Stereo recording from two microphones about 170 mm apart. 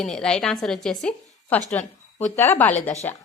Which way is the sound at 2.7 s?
40° left (ahead or behind).